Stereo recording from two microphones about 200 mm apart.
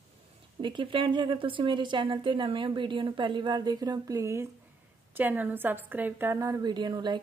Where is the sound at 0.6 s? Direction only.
25° right (ahead or behind).